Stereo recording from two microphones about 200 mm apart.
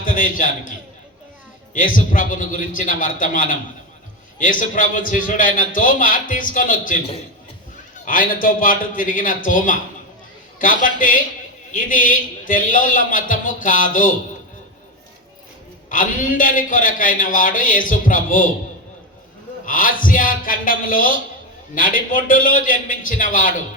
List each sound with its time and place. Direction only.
0.0 s a man's voice: 45° left (ahead or behind)
2.0 s a man's voice: 40° left (ahead or behind)
8.0 s a man's voice: 45° left (ahead or behind)
15.9 s a man's voice: 40° left (ahead or behind)
19.6 s a man's voice: 45° left (ahead or behind)